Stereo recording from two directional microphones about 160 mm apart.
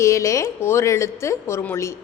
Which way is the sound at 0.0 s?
20° left (ahead or behind).